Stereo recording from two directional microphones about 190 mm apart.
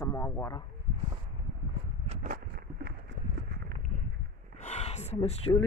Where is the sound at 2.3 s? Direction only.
55° right (ahead or behind).